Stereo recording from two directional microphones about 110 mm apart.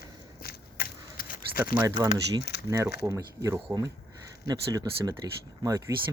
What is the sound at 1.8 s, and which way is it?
Speech, 30° right (ahead or behind).